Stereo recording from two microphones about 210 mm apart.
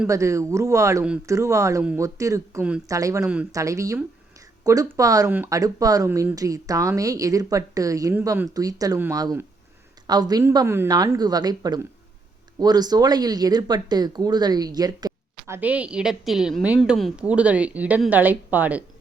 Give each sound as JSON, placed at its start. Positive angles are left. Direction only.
{"t": 0.0, "sound": "speech", "side_deg": -15}